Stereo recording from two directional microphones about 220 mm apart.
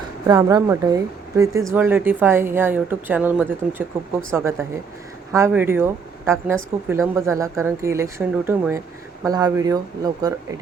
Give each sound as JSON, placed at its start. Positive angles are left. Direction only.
{"t": 0.3, "sound": "speech", "side_deg": -15}